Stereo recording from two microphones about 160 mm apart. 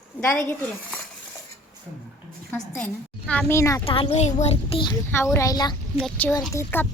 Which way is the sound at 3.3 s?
10° left (ahead or behind).